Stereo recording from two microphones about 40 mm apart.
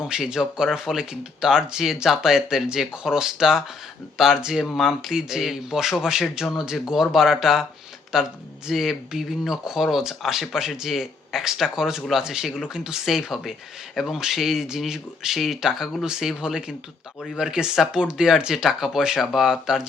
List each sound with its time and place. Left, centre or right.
0.0 s speech: centre